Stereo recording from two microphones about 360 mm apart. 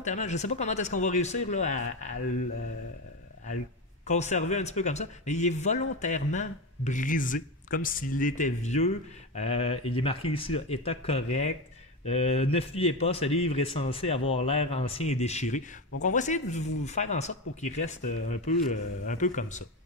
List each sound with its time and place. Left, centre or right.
0.0 s a man's voice: centre
4.1 s a man's voice: centre